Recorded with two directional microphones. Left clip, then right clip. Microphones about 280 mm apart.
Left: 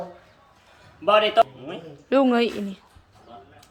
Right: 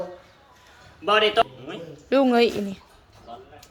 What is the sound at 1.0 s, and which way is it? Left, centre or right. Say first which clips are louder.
Speech: left 2 dB; left.